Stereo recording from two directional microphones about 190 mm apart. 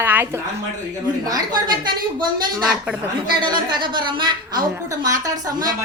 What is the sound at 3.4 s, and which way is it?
Speech, 25° right (ahead or behind).